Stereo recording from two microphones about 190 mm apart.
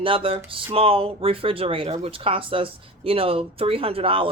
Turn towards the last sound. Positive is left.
turn(degrees=-30)  # may be behind; listen again after turning